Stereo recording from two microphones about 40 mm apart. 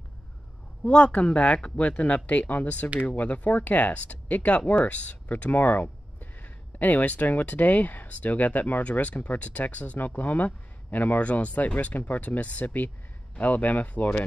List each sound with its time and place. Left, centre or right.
0.8 s speech: left
11.1 s speech: left